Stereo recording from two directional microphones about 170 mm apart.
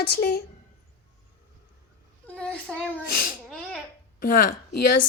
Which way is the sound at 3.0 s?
60° left (ahead or behind).